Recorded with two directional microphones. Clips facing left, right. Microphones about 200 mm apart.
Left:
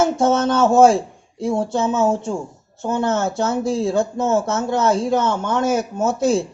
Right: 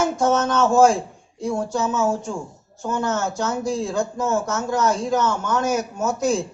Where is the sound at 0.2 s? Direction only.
25° left (ahead or behind).